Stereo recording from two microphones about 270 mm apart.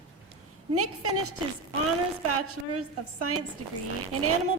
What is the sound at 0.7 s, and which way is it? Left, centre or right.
Speech, right.